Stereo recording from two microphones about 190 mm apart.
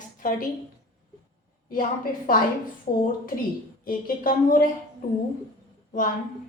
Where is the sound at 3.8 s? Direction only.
45° left (ahead or behind).